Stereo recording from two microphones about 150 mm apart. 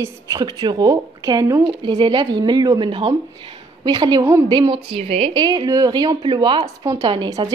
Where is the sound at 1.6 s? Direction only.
30° right (ahead or behind).